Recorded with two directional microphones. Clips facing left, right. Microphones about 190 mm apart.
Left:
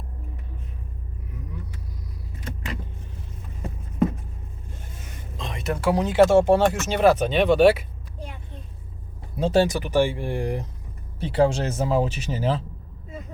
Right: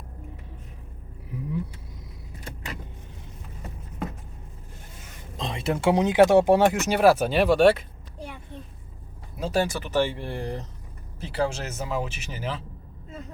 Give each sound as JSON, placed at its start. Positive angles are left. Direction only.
{"t": 5.4, "sound": "speech", "side_deg": -30}
{"t": 9.4, "sound": "speech", "side_deg": 25}
{"t": 9.7, "sound": "speech", "side_deg": 15}
{"t": 11.2, "sound": "speech", "side_deg": 30}